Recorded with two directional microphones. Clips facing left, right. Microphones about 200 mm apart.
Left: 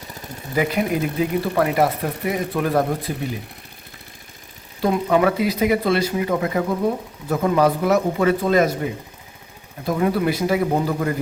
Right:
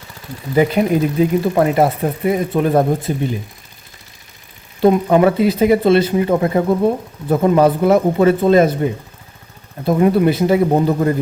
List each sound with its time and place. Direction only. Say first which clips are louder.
0.5 s speech: right 6 dB; 30° right (ahead or behind)
4.8 s speech: right 6 dB; 30° right (ahead or behind)